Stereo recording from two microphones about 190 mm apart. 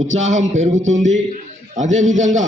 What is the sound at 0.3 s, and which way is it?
Speech, 40° right (ahead or behind).